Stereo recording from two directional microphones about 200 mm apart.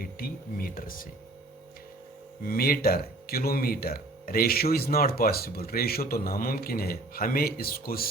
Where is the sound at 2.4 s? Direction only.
50° left (ahead or behind).